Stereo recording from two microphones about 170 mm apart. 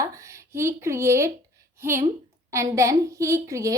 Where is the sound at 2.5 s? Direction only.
15° right (ahead or behind).